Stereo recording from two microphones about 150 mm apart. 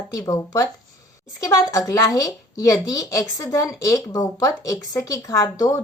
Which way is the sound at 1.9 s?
20° left (ahead or behind).